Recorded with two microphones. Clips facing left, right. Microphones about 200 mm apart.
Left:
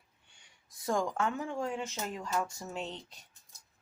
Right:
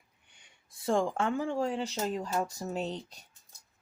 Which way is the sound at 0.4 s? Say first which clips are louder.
Right 3 dB; 30° right (ahead or behind).